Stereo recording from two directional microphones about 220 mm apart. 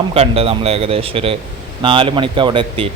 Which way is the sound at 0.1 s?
25° right (ahead or behind).